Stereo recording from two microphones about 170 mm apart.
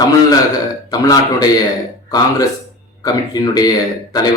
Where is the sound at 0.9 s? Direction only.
20° left (ahead or behind).